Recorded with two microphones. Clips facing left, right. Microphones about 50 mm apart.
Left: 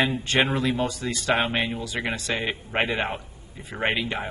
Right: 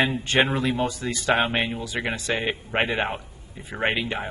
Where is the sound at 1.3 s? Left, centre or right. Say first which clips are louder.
Right 1 dB; centre.